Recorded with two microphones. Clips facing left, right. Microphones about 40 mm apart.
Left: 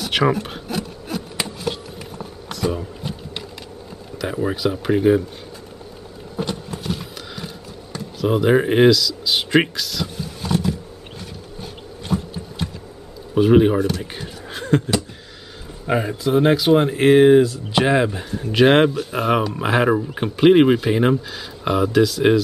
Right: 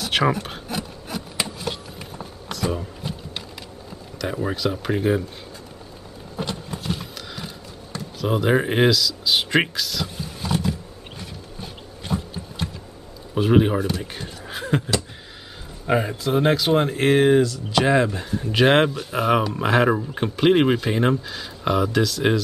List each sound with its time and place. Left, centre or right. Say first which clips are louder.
0.0 s a sound: left 2 dB; centre
4.2 s speech: left 3 dB; centre
6.4 s clip-clop: left 3 dB; centre
6.7 s a sound: left 2 dB; centre
13.3 s speech: left 4 dB; centre
15.9 s speech: left 2 dB; centre
17.4 s speech: left 3 dB; centre
17.9 s speech: left 1 dB; centre